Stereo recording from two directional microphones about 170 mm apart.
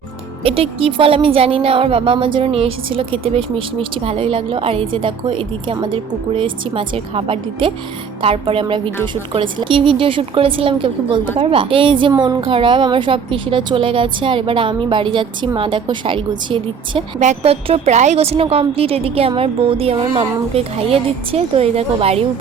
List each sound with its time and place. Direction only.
0.4 s a woman's voice: 35° right (ahead or behind)
17.2 s speech: 40° right (ahead or behind)